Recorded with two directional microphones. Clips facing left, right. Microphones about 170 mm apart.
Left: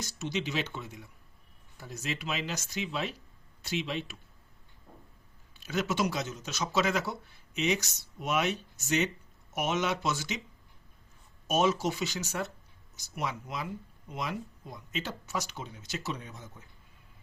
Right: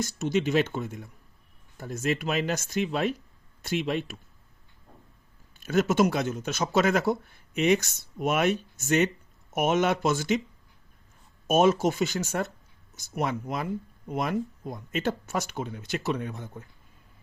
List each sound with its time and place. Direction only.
0.0 s speech: 50° right (ahead or behind)
5.5 s speech: 50° right (ahead or behind)
11.4 s speech: 50° right (ahead or behind)